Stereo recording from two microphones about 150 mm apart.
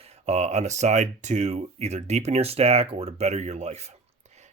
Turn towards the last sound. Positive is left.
turn(degrees=-45)  # may be behind; listen again after turning